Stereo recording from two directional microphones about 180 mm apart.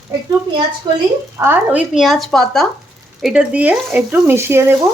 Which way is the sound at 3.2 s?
5° right (ahead or behind).